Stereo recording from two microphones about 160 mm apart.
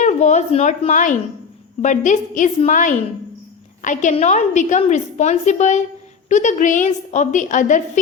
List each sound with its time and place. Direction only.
0.0 s a woman's voice: 50° left (ahead or behind)